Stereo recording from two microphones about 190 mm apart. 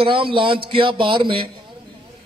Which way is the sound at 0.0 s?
30° right (ahead or behind).